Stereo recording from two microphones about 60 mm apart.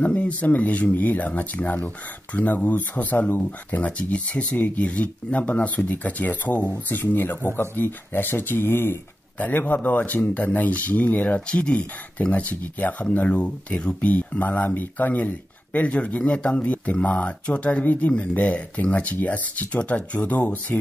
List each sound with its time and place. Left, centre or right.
0.0 s speech: left